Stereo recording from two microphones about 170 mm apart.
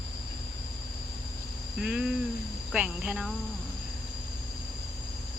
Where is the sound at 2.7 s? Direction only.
5° right (ahead or behind).